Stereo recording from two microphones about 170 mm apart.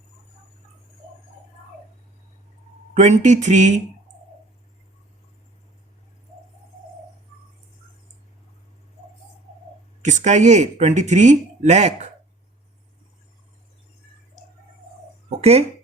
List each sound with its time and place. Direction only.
2.9 s speech: 40° right (ahead or behind)
10.0 s speech: 45° right (ahead or behind)
15.4 s speech: 40° right (ahead or behind)